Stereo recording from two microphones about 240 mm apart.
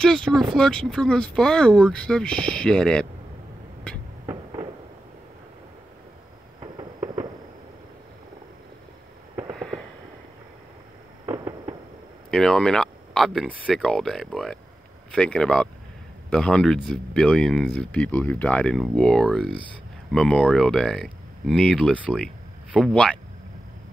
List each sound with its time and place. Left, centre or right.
0.0 s speech: centre
6.6 s fireworks: centre
11.2 s fireworks: centre
12.3 s speech: centre